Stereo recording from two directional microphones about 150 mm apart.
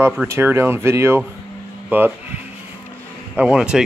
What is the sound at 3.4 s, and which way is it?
Speech, 10° right (ahead or behind).